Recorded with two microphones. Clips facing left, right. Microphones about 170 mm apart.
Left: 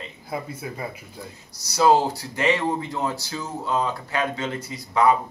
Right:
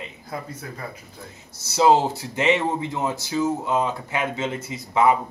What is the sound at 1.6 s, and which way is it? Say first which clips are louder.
Speech: right 1 dB; 25° right (ahead or behind).